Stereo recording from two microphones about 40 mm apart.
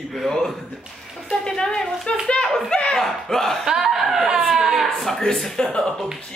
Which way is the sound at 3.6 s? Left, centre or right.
Centre.